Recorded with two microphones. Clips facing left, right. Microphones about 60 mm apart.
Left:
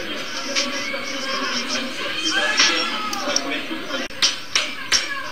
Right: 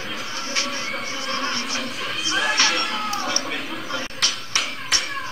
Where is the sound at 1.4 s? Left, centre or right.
Right.